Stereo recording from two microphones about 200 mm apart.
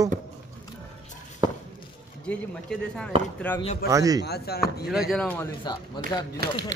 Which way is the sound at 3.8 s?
15° right (ahead or behind).